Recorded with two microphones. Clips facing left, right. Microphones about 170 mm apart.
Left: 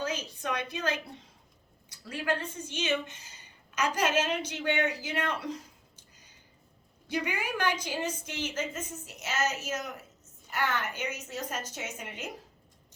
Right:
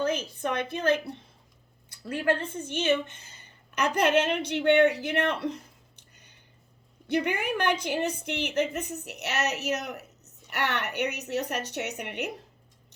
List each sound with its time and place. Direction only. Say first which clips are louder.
0.0 s speech: right 6 dB; 55° right (ahead or behind)
6.0 s a sound: right 1 dB; 65° right (ahead or behind)
7.1 s a woman's voice: right 5 dB; 60° right (ahead or behind)